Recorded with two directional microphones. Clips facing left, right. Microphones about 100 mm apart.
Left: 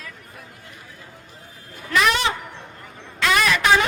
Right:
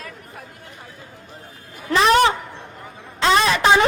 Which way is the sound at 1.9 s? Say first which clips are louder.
Right 3 dB; 30° right (ahead or behind).